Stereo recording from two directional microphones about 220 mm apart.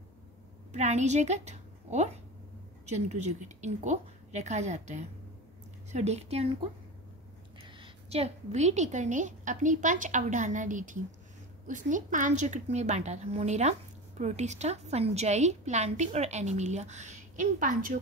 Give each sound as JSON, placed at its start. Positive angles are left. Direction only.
{"t": 0.7, "sound": "a woman's voice", "side_deg": -30}
{"t": 7.6, "sound": "a woman's voice", "side_deg": -25}